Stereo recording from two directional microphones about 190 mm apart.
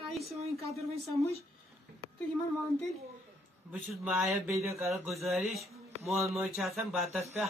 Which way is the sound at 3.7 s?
5° right (ahead or behind).